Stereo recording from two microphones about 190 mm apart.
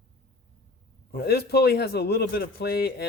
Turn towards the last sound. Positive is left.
turn(degrees=55)  # may be behind; listen again after turning